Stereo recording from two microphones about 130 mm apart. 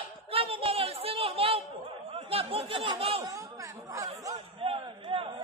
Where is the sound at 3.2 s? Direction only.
25° right (ahead or behind).